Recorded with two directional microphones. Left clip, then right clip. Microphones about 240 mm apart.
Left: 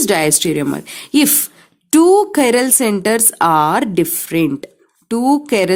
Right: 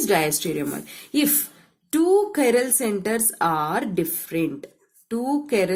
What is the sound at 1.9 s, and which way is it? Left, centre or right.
A woman's voice, left.